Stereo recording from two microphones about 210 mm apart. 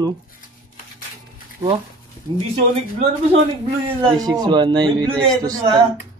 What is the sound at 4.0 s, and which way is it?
Speech, 20° right (ahead or behind).